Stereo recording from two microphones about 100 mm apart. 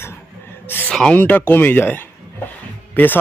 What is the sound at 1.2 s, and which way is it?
Speech, 20° left (ahead or behind).